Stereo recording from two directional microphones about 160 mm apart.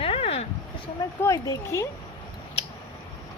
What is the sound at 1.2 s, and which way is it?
Speech, 20° left (ahead or behind).